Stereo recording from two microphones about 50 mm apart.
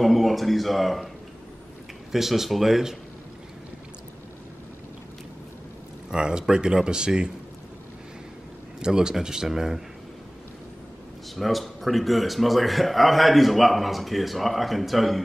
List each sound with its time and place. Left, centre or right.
0.0 s speech: centre
2.1 s speech: centre
6.0 s speech: centre
8.7 s speech: centre
11.3 s speech: centre